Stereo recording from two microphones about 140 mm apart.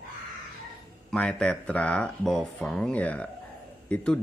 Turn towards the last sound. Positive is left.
turn(degrees=10)  # may be behind; listen again after turning